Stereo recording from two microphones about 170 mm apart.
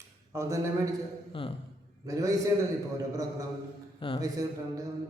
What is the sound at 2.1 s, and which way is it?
Speech, 20° right (ahead or behind).